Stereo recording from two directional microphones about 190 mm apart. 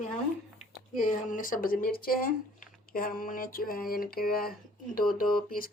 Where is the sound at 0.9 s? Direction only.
45° left (ahead or behind).